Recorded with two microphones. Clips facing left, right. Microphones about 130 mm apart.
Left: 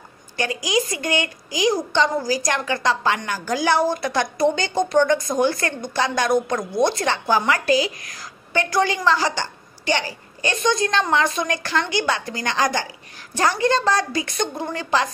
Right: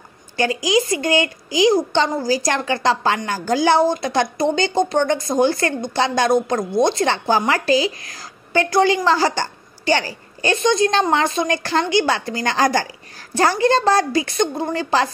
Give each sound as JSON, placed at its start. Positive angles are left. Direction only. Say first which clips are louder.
{"t": 0.4, "sound": "a child's voice", "louder": "right 4 dB", "side_deg": -30}